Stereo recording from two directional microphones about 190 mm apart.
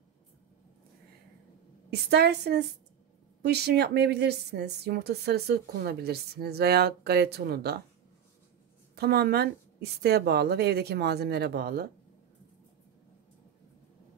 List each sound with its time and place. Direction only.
1.9 s a woman's voice: 60° right (ahead or behind)
8.9 s a woman's voice: 60° right (ahead or behind)